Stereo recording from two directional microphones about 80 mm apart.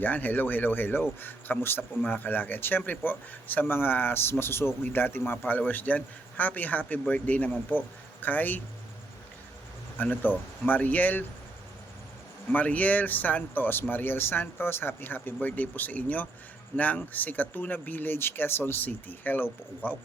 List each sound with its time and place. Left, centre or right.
0.0 s speech: left
10.0 s speech: left
12.5 s speech: centre